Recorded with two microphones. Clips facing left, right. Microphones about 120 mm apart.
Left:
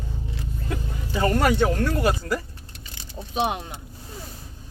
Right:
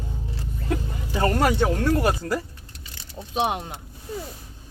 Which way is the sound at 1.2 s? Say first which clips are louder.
Even; 35° right (ahead or behind).